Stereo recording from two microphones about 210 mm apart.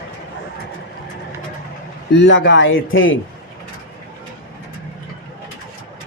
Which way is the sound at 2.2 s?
60° left (ahead or behind).